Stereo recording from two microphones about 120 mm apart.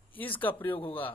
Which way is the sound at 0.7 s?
45° left (ahead or behind).